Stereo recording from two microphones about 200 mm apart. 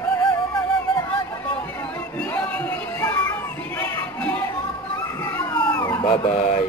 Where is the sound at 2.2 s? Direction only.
5° left (ahead or behind).